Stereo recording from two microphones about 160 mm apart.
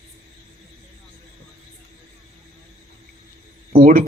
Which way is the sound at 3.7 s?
60° right (ahead or behind).